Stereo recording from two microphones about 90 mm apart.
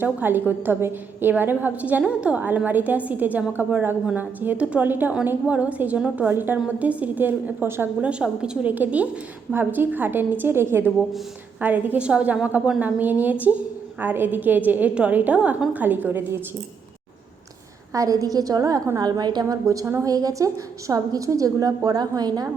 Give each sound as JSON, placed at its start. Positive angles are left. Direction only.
{"t": 0.0, "sound": "a woman's voice", "side_deg": -20}
{"t": 8.0, "sound": "a woman's voice", "side_deg": -10}
{"t": 17.9, "sound": "a woman's voice", "side_deg": -40}
{"t": 19.6, "sound": "a woman's voice", "side_deg": -40}